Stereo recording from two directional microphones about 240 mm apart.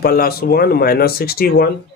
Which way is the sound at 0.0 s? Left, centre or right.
Left.